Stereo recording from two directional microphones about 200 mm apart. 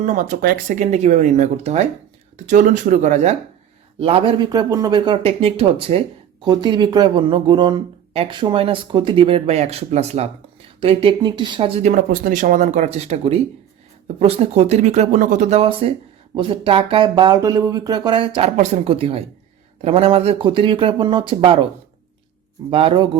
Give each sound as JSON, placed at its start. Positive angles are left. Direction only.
{"t": 0.0, "sound": "speech", "side_deg": -40}
{"t": 18.3, "sound": "speech", "side_deg": -35}
{"t": 22.7, "sound": "speech", "side_deg": -25}